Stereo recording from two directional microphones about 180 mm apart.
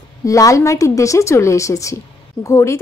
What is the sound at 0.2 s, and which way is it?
A woman's voice, 20° left (ahead or behind).